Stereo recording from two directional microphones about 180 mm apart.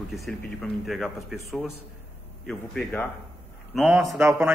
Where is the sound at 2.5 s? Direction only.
5° left (ahead or behind).